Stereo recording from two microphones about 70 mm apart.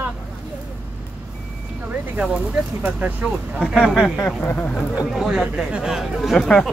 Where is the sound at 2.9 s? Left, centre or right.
Centre.